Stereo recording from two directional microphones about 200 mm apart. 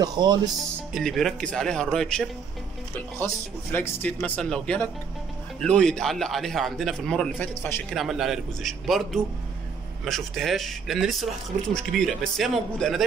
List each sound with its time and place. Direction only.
0.0 s speech: 20° right (ahead or behind)
0.9 s a man's voice: centre (ahead or behind)
3.7 s a man's voice: 10° left (ahead or behind)